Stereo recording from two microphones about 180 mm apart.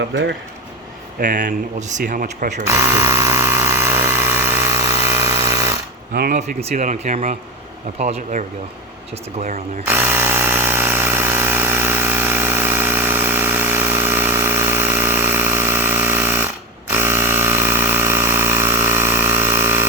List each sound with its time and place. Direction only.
0.0 s speech: 85° right
1.2 s speech: 50° right (ahead or behind)
2.6 s tools: 15° right (ahead or behind)
6.1 s speech: 55° right (ahead or behind)
6.6 s speech: 40° right (ahead or behind)
9.8 s tools: 10° right (ahead or behind)
16.9 s a sound: 15° right (ahead or behind)